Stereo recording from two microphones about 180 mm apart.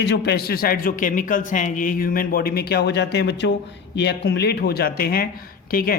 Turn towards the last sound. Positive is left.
turn(degrees=55)  # may be behind; listen again after turning